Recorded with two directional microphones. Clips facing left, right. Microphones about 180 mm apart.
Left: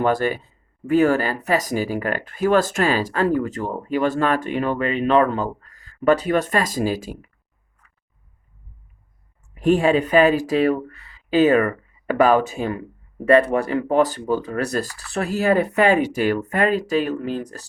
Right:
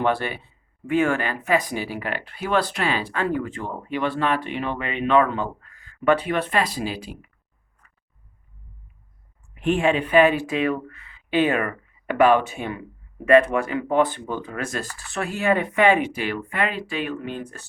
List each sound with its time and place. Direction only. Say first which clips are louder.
0.0 s speech: left 4 dB; 40° left (ahead or behind)
9.6 s speech: left 4 dB; 40° left (ahead or behind)